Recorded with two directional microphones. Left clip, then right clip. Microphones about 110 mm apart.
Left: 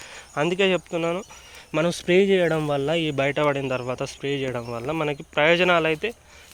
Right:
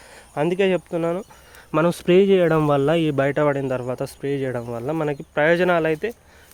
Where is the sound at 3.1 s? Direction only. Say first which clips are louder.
Right 2 dB; 90° right.